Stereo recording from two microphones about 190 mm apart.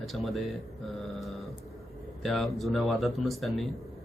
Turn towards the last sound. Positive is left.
turn(degrees=0)  # may be behind; listen again after turning